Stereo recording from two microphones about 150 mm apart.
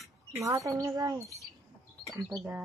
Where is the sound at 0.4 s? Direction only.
20° right (ahead or behind).